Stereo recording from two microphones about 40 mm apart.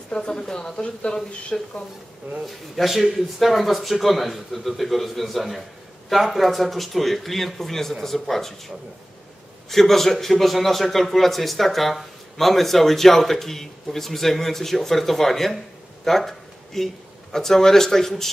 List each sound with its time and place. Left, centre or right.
0.1 s speech: centre
2.4 s a man's voice: centre